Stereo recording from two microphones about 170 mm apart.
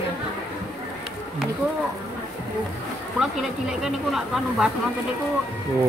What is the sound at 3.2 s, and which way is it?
Speech, 5° right (ahead or behind).